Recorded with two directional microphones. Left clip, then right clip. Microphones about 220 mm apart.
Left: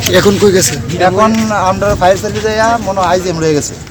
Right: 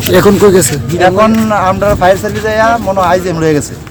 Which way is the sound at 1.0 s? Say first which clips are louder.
Right 2 dB; 10° right (ahead or behind).